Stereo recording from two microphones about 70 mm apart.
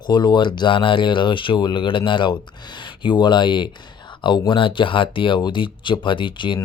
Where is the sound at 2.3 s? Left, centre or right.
Left.